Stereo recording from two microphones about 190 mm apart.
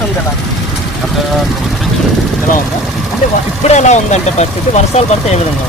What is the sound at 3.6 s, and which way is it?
Speech, 35° left (ahead or behind).